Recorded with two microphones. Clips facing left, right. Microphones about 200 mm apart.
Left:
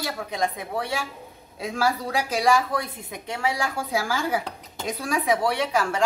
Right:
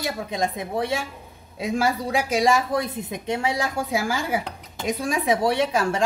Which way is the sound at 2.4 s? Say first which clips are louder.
Right 1 dB; 20° right (ahead or behind).